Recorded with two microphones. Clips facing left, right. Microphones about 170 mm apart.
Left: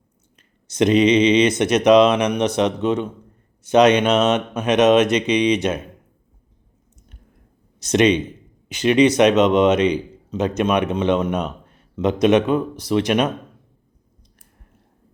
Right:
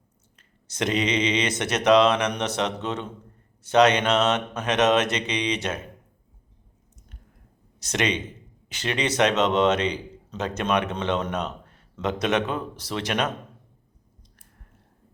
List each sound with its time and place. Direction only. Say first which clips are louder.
0.3 s speech: left 10 dB; 20° left (ahead or behind)
7.8 s speech: left 10 dB; 20° left (ahead or behind)